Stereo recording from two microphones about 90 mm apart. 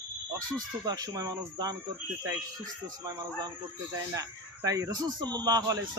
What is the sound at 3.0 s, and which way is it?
Speech, 40° right (ahead or behind).